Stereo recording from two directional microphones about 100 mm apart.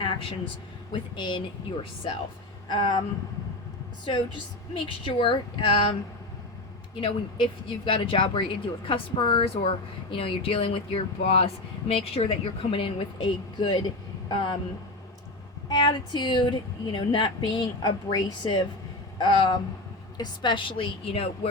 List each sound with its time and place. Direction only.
0.0 s a woman's voice: 60° left (ahead or behind)
2.6 s a woman's voice: 45° left (ahead or behind)
4.7 s speech: 60° left (ahead or behind)
15.7 s a woman's voice: 50° left (ahead or behind)
19.2 s speech: 60° left (ahead or behind); by 21.5 s 75° left (ahead or behind)